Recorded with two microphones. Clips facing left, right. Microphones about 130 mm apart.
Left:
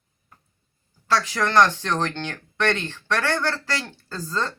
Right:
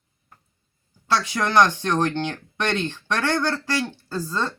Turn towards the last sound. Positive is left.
turn(degrees=-10)  # may be behind; listen again after turning